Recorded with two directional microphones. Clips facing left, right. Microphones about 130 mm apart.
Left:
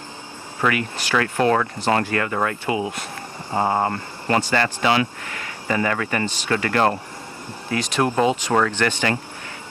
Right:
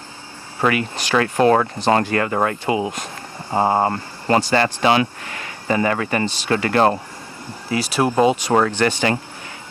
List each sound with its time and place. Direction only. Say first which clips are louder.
0.6 s speech: right 3 dB; 30° right (ahead or behind)
7.7 s speech: right 2 dB; 10° right (ahead or behind)